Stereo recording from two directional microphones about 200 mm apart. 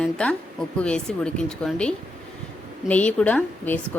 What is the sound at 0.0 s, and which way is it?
A woman's voice, 5° left (ahead or behind).